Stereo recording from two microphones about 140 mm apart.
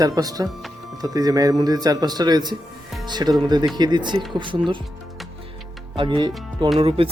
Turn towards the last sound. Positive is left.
turn(degrees=-45)  # may be behind; listen again after turning